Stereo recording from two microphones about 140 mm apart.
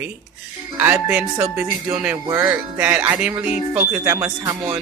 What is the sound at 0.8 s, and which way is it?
Speech, 10° right (ahead or behind).